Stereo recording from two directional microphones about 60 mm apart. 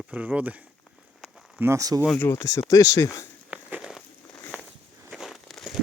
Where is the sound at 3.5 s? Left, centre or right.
Right.